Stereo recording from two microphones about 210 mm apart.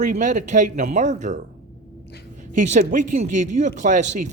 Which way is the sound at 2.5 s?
35° right (ahead or behind).